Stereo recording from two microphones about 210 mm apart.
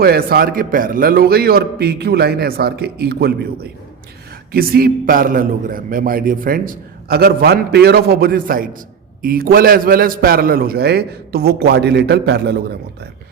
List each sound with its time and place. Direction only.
0.0 s a man's voice: 45° right (ahead or behind)